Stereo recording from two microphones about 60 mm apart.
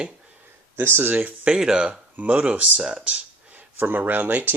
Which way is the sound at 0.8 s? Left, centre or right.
Right.